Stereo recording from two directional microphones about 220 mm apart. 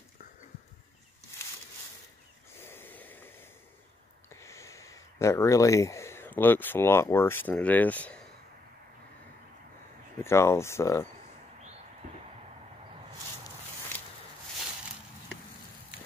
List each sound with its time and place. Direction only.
2.6 s snort: 10° left (ahead or behind)
4.3 s speech: 15° left (ahead or behind)
10.2 s speech: 10° left (ahead or behind)
12.0 s a sound: 35° right (ahead or behind)